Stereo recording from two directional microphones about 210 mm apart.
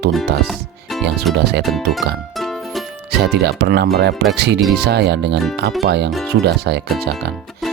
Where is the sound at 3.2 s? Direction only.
50° right (ahead or behind).